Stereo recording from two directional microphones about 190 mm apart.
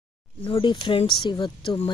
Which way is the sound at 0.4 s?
25° left (ahead or behind).